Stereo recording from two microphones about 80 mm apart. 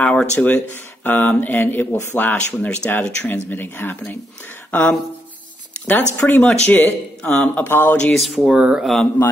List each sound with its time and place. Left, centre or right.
0.0 s speech: centre
8.1 s speech: centre
8.5 s speech: centre
8.8 s speech: centre